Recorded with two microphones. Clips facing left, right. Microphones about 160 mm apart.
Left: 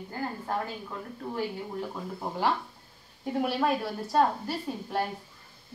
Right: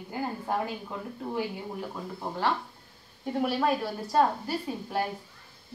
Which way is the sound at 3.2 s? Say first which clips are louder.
Even; centre (ahead or behind).